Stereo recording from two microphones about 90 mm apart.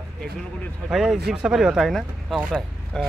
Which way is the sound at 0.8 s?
5° right (ahead or behind).